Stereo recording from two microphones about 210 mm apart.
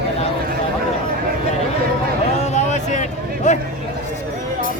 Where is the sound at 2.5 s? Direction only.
35° left (ahead or behind).